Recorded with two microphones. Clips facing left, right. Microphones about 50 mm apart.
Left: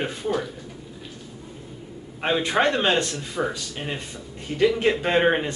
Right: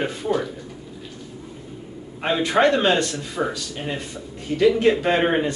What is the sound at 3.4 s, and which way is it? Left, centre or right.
Speech, centre.